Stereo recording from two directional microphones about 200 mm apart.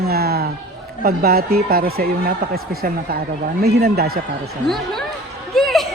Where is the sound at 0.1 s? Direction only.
50° right (ahead or behind).